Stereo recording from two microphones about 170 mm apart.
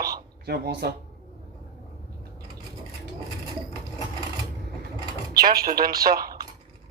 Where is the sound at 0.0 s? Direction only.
65° right (ahead or behind).